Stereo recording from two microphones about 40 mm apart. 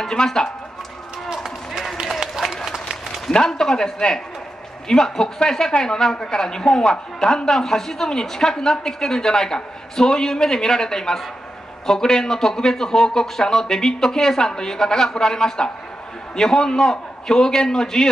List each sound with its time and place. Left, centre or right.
0.0 s speech: centre
3.3 s speech: centre